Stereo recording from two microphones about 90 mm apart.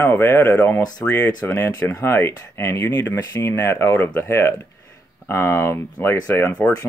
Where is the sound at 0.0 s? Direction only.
25° left (ahead or behind).